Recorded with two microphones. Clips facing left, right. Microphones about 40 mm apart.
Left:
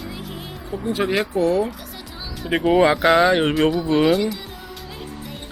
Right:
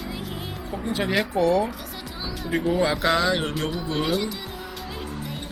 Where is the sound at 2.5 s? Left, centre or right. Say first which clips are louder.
Left 6 dB; left.